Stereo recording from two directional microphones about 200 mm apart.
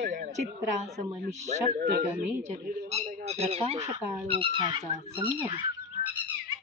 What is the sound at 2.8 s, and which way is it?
Speech, 35° right (ahead or behind).